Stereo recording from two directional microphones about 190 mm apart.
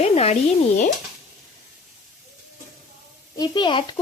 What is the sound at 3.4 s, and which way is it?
Speech, 25° left (ahead or behind).